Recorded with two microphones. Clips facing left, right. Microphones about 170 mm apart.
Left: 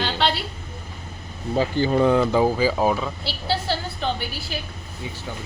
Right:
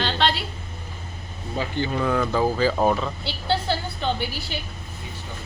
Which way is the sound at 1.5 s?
35° left (ahead or behind).